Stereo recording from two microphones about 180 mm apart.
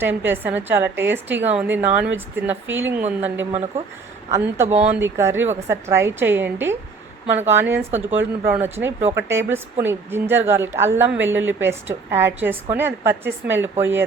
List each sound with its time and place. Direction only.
0.0 s speech: 10° right (ahead or behind)